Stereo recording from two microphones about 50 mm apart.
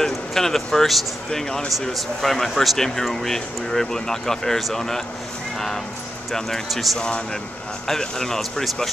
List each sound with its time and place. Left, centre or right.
0.0 s speech: centre
6.3 s speech: centre
7.0 s speech: centre